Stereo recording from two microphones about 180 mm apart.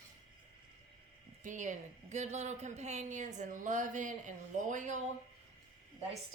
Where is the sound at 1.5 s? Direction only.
45° right (ahead or behind).